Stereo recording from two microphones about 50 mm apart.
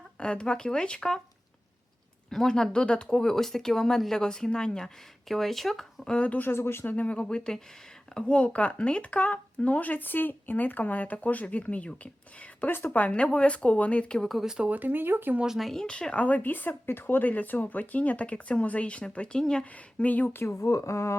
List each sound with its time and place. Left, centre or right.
0.2 s speech: left
2.3 s speech: centre
6.1 s speech: left
6.4 s speech: left
6.8 s speech: left
14.2 s speech: centre
14.4 s speech: centre
14.7 s speech: right
15.4 s speech: centre
15.7 s speech: centre
19.7 s speech: left
20.6 s speech: left